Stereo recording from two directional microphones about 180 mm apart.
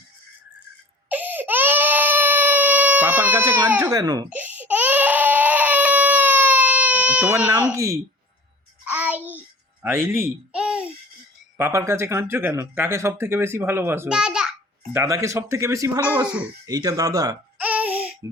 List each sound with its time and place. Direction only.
1.1 s baby cry: 10° right (ahead or behind)
3.8 s speech: 20° right (ahead or behind)
4.3 s baby cry: 10° right (ahead or behind)
8.9 s music: 10° right (ahead or behind)
9.8 s a sound: 15° right (ahead or behind)
11.5 s speech: 10° right (ahead or behind)
14.9 s speech: 15° right (ahead or behind)
16.6 s speech: 20° right (ahead or behind)
17.6 s baby laughter: 10° right (ahead or behind)